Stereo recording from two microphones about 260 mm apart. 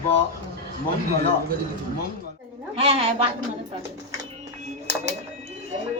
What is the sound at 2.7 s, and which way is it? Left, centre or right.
Speech, right.